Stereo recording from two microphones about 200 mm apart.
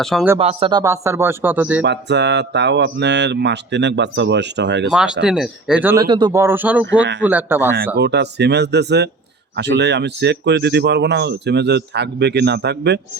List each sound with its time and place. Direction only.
0.0 s speech: centre (ahead or behind)
0.3 s speech: 30° right (ahead or behind); by 1.8 s 10° right (ahead or behind)
1.8 s speech: 60° right (ahead or behind)
4.9 s speech: 5° right (ahead or behind)
6.1 s speech: 20° right (ahead or behind)
7.9 s speech: 55° right (ahead or behind)